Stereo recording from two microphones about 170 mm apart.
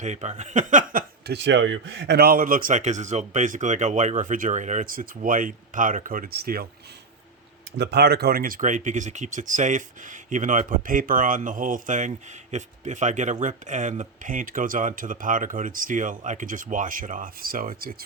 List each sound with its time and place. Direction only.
0.0 s speech: 40° right (ahead or behind)
1.3 s speech: 90° right; by 6.7 s 65° right (ahead or behind)
7.8 s speech: 75° right (ahead or behind); by 17.9 s 55° right (ahead or behind)